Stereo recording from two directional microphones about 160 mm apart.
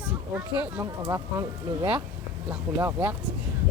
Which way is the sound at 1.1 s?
25° right (ahead or behind).